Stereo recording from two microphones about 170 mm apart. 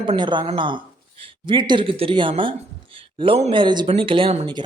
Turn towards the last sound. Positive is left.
turn(degrees=-35)  # may be behind; listen again after turning